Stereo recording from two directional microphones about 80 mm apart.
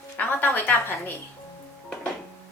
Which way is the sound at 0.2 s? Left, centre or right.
Left.